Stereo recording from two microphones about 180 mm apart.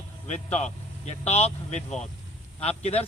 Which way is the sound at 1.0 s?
35° left (ahead or behind).